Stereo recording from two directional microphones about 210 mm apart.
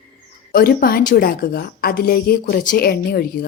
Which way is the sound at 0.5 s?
45° left (ahead or behind).